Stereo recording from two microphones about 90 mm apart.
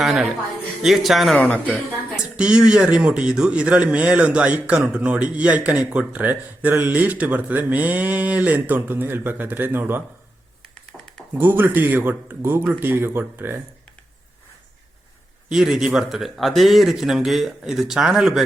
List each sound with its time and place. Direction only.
0.8 s speech: 5° right (ahead or behind)
1.4 s speech: 15° left (ahead or behind)
2.3 s speech: 10° right (ahead or behind)
10.9 s a sound: 5° left (ahead or behind)
11.3 s speech: 25° right (ahead or behind)
15.4 s speech: 10° right (ahead or behind)